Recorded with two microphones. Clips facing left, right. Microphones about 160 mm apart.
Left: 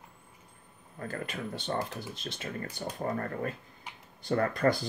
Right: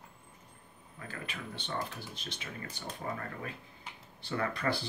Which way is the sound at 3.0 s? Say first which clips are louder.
Left 7 dB; 45° left (ahead or behind).